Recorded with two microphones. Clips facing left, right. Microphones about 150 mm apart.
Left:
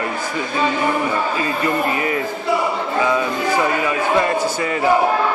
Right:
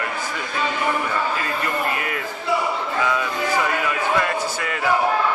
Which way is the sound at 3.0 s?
25° left (ahead or behind).